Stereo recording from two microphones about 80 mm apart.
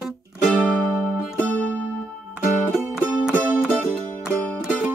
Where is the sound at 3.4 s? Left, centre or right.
Left.